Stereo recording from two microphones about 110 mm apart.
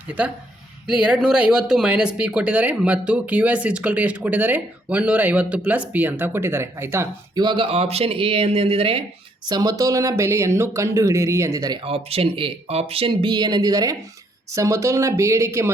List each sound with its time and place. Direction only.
0.9 s speech: 10° right (ahead or behind)
7.3 s speech: 45° right (ahead or behind); by 9.0 s 60° right (ahead or behind)
9.5 s speech: 35° right (ahead or behind)
11.8 s speech: 60° right (ahead or behind); by 15.7 s 25° right (ahead or behind)